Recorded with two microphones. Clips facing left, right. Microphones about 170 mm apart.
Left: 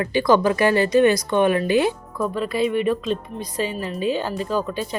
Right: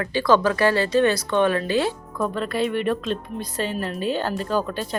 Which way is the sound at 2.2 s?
5° left (ahead or behind).